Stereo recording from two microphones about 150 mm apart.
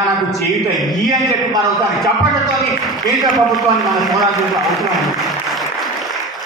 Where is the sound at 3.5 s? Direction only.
Centre (ahead or behind).